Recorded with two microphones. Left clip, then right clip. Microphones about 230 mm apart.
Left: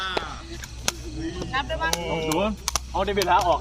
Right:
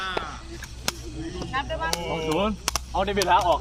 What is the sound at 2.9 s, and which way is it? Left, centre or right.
Speech, right.